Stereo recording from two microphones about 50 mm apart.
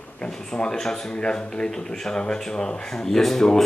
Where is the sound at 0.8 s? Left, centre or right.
Centre.